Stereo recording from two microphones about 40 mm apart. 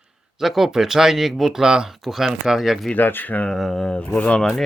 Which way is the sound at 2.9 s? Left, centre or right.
Left.